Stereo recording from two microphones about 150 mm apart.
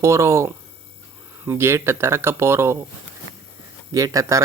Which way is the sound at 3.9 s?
25° right (ahead or behind).